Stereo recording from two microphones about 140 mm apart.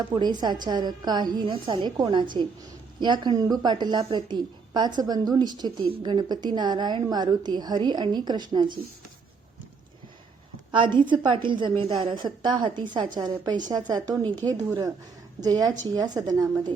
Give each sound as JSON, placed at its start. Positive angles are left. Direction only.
{"t": 0.1, "sound": "a woman's voice", "side_deg": -30}
{"t": 10.7, "sound": "a woman's voice", "side_deg": -35}